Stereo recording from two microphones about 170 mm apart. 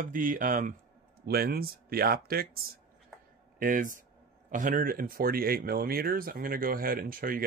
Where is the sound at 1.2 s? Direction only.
65° right (ahead or behind).